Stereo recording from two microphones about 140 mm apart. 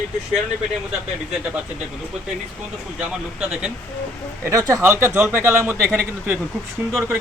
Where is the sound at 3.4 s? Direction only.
5° right (ahead or behind).